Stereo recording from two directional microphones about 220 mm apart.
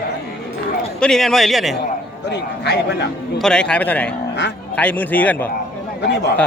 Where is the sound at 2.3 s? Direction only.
50° left (ahead or behind).